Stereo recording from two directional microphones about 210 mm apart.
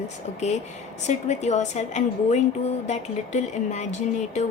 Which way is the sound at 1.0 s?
35° left (ahead or behind).